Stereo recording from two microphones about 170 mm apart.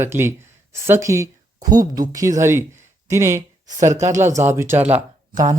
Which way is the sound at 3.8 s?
45° right (ahead or behind).